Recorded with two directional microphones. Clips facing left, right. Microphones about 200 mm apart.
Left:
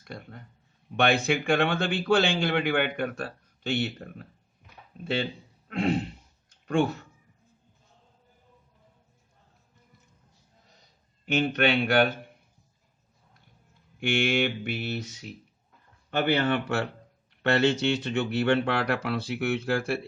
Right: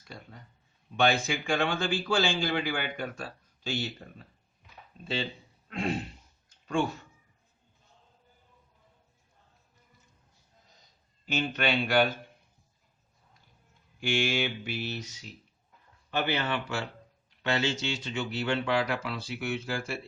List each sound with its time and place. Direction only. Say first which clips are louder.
0.0 s a man's voice: left 5 dB; 60° left (ahead or behind)
6.5 s a sound: left 4 dB; 60° left (ahead or behind)
11.3 s a man's voice: left 5 dB; 60° left (ahead or behind)
14.0 s a man's voice: left 4 dB; 60° left (ahead or behind)
16.0 s a man's voice: left 5 dB; 55° left (ahead or behind)